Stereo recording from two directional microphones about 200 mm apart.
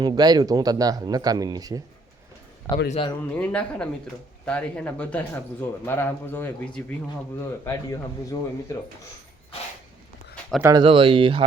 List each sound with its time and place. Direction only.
0.0 s speech: 20° right (ahead or behind)
2.9 s speech: 25° left (ahead or behind)
3.3 s speech: 5° left (ahead or behind)
10.6 s speech: 20° right (ahead or behind)